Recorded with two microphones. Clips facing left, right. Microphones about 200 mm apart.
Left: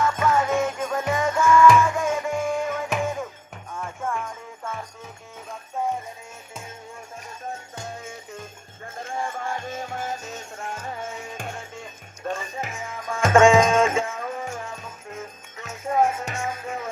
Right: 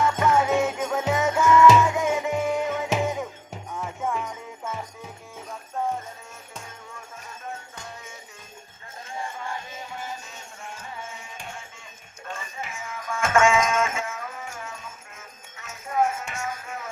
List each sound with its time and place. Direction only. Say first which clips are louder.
0.0 s jingle bell: even; 10° right (ahead or behind)
1.5 s music: even; 20° right (ahead or behind)
2.4 s music: even; 5° right (ahead or behind)
2.8 s music: right 1 dB; 20° right (ahead or behind)
3.8 s music: right 1 dB; 5° right (ahead or behind)
9.0 s music: left 4 dB; 50° left (ahead or behind); by 16.9 s 30° left (ahead or behind)